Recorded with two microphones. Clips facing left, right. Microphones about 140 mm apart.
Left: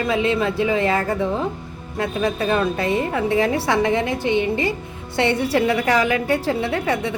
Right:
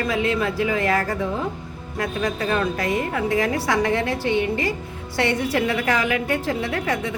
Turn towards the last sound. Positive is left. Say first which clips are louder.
# left 3 dB
turn(degrees=30)  # may be behind; listen again after turning